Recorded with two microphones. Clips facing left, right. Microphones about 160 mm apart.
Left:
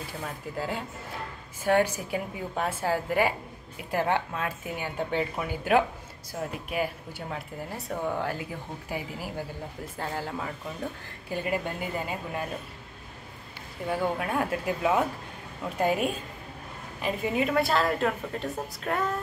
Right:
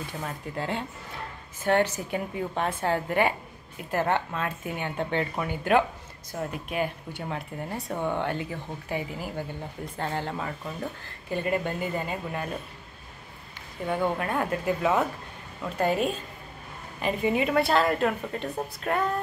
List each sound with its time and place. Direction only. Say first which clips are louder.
0.6 s speech: right 1 dB; 5° left (ahead or behind)
13.8 s a woman's voice: right 1 dB; 5° left (ahead or behind)